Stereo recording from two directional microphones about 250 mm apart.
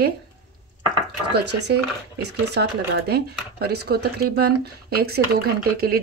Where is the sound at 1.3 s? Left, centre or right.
Right.